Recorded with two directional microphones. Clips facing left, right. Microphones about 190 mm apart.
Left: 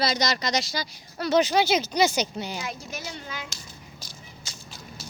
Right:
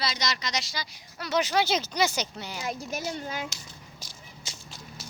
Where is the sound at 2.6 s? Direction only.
45° right (ahead or behind).